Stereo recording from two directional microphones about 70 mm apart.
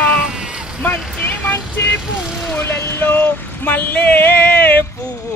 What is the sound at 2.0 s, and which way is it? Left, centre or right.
Speech, centre.